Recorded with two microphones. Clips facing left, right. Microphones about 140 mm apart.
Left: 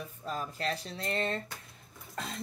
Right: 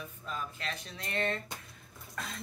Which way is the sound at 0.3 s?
40° left (ahead or behind).